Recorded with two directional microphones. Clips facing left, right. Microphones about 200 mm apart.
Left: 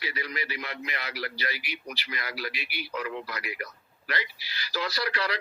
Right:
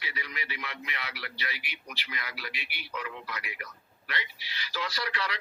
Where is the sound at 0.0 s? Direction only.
40° left (ahead or behind).